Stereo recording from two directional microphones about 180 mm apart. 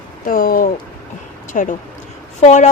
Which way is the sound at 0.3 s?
50° left (ahead or behind).